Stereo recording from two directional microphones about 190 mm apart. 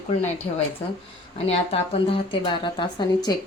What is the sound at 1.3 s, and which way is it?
A woman's voice, 30° left (ahead or behind).